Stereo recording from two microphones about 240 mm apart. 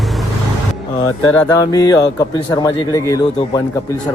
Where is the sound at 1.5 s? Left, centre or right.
Centre.